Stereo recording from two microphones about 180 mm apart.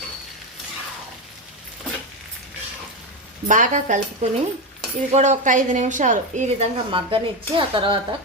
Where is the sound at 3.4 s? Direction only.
45° right (ahead or behind).